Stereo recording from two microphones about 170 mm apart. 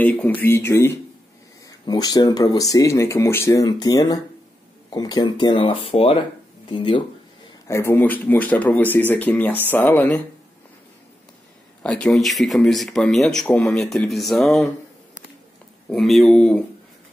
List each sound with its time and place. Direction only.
0.0 s speech: 10° left (ahead or behind); by 7.0 s 30° left (ahead or behind)
7.6 s speech: 15° left (ahead or behind)
11.8 s speech: 5° left (ahead or behind)
15.9 s speech: centre (ahead or behind)